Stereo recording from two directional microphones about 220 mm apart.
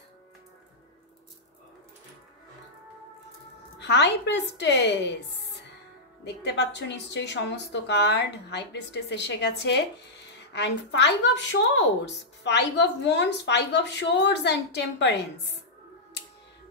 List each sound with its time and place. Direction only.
3.8 s a woman's voice: 50° left (ahead or behind)
12.4 s a woman's voice: 55° left (ahead or behind)